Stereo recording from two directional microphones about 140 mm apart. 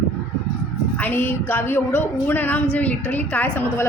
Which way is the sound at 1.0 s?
15° left (ahead or behind).